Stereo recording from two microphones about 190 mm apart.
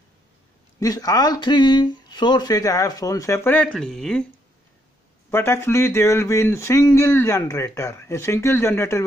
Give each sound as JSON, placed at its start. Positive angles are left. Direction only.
{"t": 0.7, "sound": "speech", "side_deg": 20}
{"t": 5.3, "sound": "speech", "side_deg": 15}